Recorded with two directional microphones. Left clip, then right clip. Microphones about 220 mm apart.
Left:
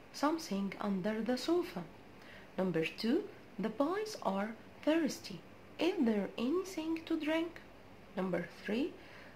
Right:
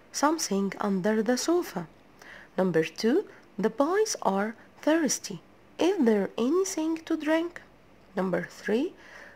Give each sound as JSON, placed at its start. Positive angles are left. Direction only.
{"t": 0.1, "sound": "speech", "side_deg": -50}